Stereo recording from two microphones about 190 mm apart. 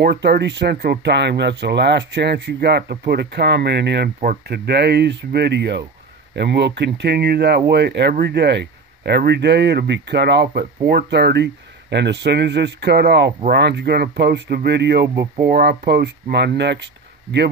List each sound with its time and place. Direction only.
0.0 s speech: 60° right (ahead or behind)